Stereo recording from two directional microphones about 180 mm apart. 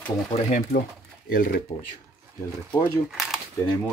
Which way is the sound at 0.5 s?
50° left (ahead or behind).